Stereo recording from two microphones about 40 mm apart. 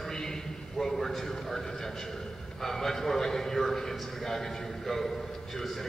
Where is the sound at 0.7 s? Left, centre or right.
Centre.